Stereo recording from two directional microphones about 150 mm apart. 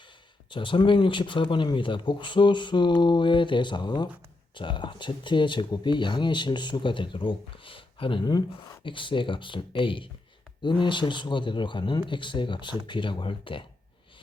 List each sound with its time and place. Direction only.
0.5 s speech: 35° left (ahead or behind)